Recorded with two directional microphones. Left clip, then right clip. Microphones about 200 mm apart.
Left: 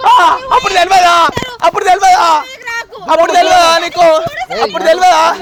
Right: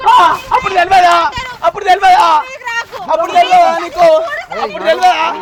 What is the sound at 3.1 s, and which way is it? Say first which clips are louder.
Speech: left 2 dB; 40° left (ahead or behind).